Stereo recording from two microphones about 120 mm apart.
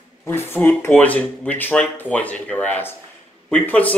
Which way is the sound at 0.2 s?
20° left (ahead or behind).